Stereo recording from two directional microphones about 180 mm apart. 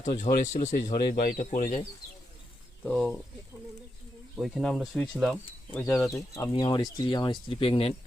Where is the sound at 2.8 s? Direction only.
5° left (ahead or behind).